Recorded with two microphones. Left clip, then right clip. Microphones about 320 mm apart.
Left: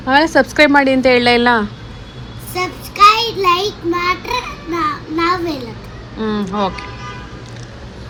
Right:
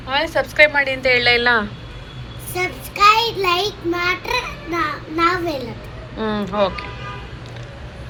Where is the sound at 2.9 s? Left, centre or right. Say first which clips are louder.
Left 4 dB; centre.